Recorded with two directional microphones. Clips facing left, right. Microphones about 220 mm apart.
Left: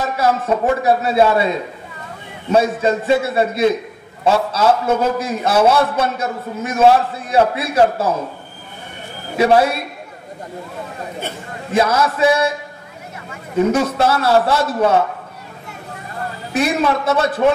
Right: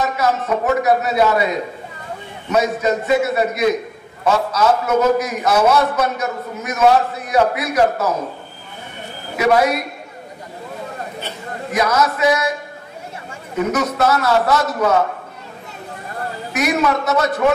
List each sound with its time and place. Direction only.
0.2 s a man's voice: 30° left (ahead or behind)
9.4 s a man's voice: 30° left (ahead or behind)
11.7 s a man's voice: 30° left (ahead or behind)
13.7 s a man's voice: 30° left (ahead or behind)
16.5 s a man's voice: 30° left (ahead or behind)